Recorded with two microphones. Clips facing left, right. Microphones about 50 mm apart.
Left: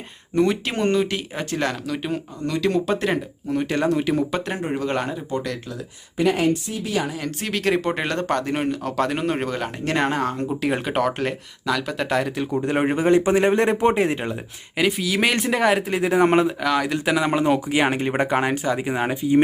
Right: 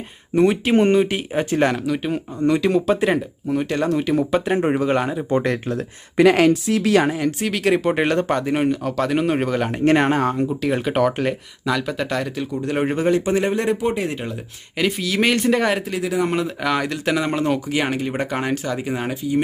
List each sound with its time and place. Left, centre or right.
0.3 s speech: centre
1.9 s speech: centre
4.5 s speech: right
4.8 s speech: centre
5.3 s speech: right
5.7 s speech: right
7.4 s speech: centre
9.6 s speech: centre
10.4 s speech: centre; by 14.2 s left
14.8 s speech: centre
15.9 s speech: left
16.6 s speech: centre
16.9 s speech: centre